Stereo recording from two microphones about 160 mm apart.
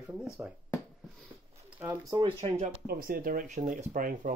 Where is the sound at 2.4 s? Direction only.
35° right (ahead or behind).